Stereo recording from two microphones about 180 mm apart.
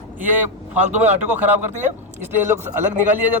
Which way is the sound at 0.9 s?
10° right (ahead or behind).